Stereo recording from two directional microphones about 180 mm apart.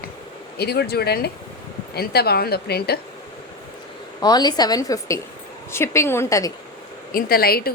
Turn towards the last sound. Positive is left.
turn(degrees=55)  # may be behind; listen again after turning